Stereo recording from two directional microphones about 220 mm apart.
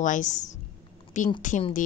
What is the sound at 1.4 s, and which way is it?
Speech, 35° left (ahead or behind).